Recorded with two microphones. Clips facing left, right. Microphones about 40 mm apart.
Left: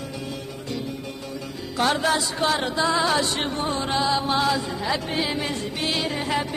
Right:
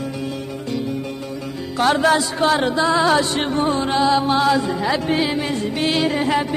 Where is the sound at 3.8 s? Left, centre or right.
Right.